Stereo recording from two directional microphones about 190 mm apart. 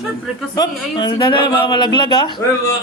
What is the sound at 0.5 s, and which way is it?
Speech, 20° left (ahead or behind).